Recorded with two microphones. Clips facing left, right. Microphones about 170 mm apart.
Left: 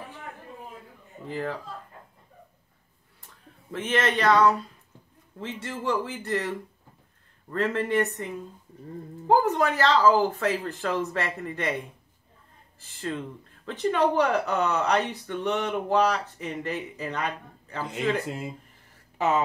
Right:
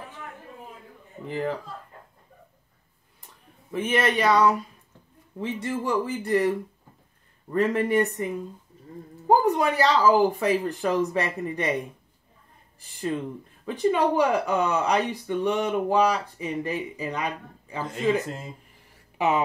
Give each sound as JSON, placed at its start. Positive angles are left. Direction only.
{"t": 1.2, "sound": "speech", "side_deg": -20}
{"t": 3.7, "sound": "speech", "side_deg": -10}
{"t": 7.5, "sound": "speech", "side_deg": -15}
{"t": 9.3, "sound": "speech", "side_deg": -15}
{"t": 13.0, "sound": "speech", "side_deg": -15}
{"t": 19.1, "sound": "speech", "side_deg": -15}